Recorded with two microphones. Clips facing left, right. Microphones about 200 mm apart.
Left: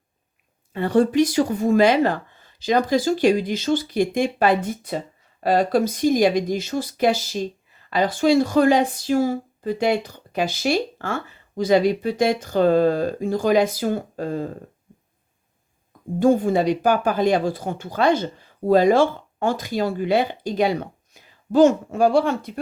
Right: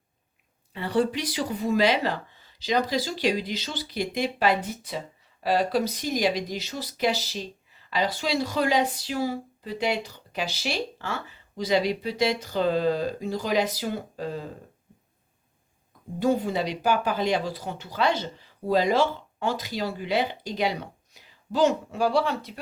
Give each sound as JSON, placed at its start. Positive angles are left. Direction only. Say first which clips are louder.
{"t": 0.7, "sound": "speech", "louder": "left 6 dB", "side_deg": 50}
{"t": 16.2, "sound": "speech", "louder": "left 7 dB", "side_deg": 50}